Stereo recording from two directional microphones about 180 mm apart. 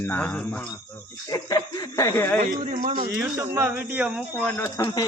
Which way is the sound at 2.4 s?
45° right (ahead or behind).